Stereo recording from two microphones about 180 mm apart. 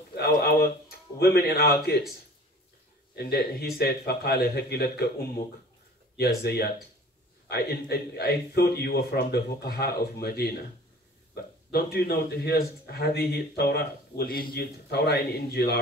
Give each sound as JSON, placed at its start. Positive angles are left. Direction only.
{"t": 0.1, "sound": "a man's voice", "side_deg": 60}
{"t": 3.2, "sound": "a man's voice", "side_deg": 60}
{"t": 6.1, "sound": "a man's voice", "side_deg": 65}
{"t": 11.7, "sound": "a man's voice", "side_deg": 60}